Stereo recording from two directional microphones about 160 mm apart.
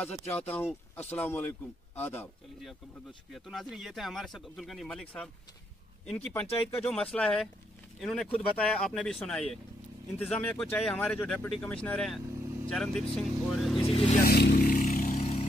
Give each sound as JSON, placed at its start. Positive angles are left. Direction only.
{"t": 0.0, "sound": "speech", "side_deg": 5}
{"t": 3.3, "sound": "speech", "side_deg": 0}
{"t": 14.2, "sound": "vehicle", "side_deg": 75}